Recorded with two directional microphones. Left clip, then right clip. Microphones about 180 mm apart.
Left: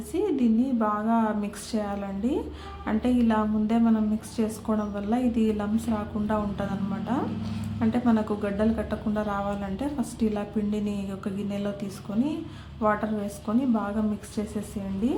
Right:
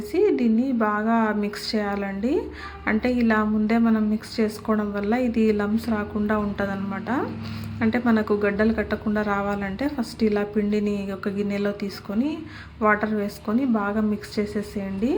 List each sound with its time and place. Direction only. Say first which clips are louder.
0.1 s speech: right 5 dB; 10° right (ahead or behind)
13.5 s speech: right 3 dB; 15° right (ahead or behind)